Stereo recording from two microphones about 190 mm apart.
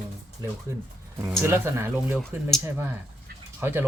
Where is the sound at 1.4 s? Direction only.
15° right (ahead or behind).